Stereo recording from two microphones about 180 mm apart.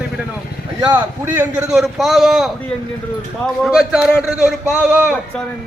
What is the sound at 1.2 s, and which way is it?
A man's voice, 10° right (ahead or behind).